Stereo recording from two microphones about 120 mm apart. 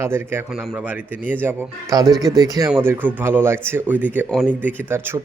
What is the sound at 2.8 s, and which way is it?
A man's voice, 15° right (ahead or behind).